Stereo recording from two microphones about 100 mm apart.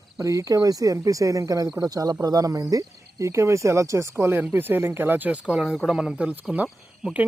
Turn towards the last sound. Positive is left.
turn(degrees=-5)  # may be behind; listen again after turning